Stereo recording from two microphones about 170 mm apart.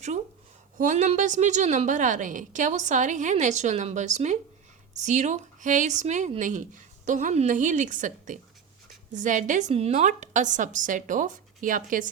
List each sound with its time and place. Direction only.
0.9 s a woman's voice: 45° right (ahead or behind)